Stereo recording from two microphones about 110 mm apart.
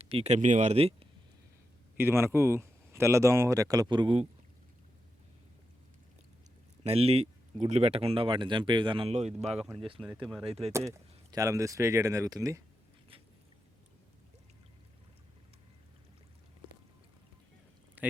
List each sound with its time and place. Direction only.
0.0 s speech: 65° right (ahead or behind)
2.0 s speech: 20° right (ahead or behind); by 4.2 s 45° right (ahead or behind)
6.8 s speech: 65° right (ahead or behind); by 9.0 s 45° right (ahead or behind)
9.0 s speech: 75° right (ahead or behind)
10.2 s speech: centre (ahead or behind)
10.4 s speech: 60° right (ahead or behind)
10.7 s speech: 30° right (ahead or behind)